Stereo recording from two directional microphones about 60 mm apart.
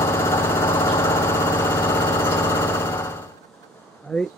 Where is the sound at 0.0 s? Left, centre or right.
Left.